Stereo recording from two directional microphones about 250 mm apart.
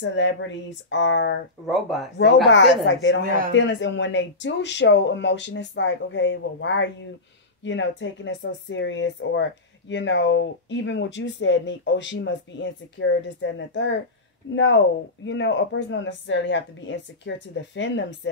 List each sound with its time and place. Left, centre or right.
0.0 s speech: left
1.7 s speech: centre
2.5 s speech: left